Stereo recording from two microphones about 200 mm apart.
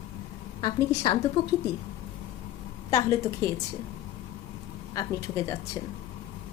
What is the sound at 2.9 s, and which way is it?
Speech, 15° left (ahead or behind).